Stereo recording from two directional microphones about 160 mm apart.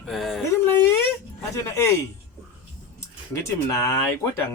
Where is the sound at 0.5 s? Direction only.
15° left (ahead or behind).